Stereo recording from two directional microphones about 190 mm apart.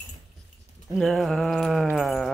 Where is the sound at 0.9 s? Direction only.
Centre (ahead or behind).